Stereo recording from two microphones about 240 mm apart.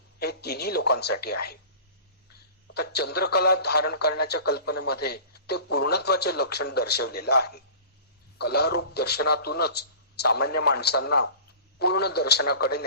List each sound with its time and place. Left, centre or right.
0.2 s speech: left
2.7 s speech: left